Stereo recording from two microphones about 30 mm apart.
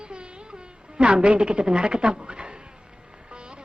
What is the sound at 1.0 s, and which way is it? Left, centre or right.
A woman's voice, right.